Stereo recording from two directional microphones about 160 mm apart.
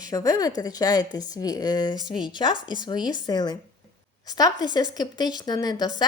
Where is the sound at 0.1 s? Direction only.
20° left (ahead or behind).